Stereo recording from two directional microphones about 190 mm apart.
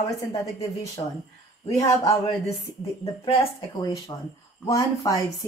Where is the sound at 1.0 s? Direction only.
30° left (ahead or behind).